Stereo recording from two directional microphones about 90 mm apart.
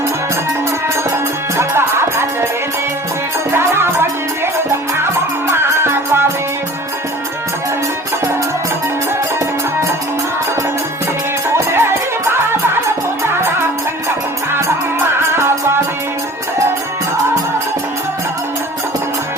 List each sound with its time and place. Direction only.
1.1 s music: 30° right (ahead or behind)
3.5 s music: 30° right (ahead or behind)
5.5 s music: 30° right (ahead or behind)
11.5 s music: 25° right (ahead or behind)